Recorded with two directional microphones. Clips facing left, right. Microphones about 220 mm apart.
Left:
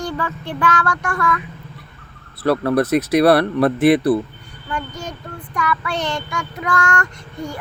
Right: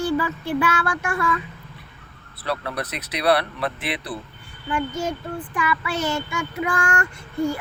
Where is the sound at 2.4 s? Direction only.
50° left (ahead or behind).